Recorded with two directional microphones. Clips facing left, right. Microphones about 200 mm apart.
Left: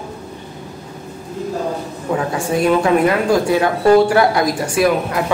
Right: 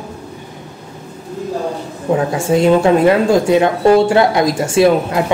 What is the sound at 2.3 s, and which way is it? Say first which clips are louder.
Speech: right 4 dB; 25° right (ahead or behind).